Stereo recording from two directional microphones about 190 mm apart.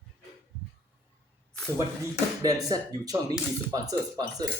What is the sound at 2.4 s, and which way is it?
Speech, 20° right (ahead or behind).